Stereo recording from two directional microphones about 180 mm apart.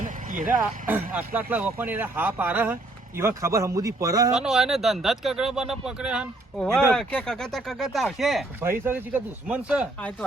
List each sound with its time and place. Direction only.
0.0 s a sound: 45° right (ahead or behind)
0.6 s speech: 10° right (ahead or behind)
4.4 s speech: centre (ahead or behind)
8.6 s speech: 10° right (ahead or behind)